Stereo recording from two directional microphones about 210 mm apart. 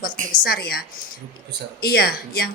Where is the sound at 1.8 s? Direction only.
45° left (ahead or behind).